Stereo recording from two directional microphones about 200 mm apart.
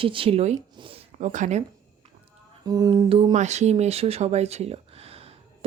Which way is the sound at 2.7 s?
20° right (ahead or behind).